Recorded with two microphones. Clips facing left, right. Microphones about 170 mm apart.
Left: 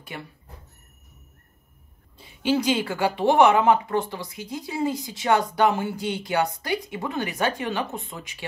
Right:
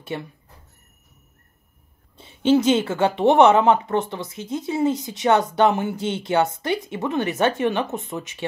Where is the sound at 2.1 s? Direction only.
25° right (ahead or behind).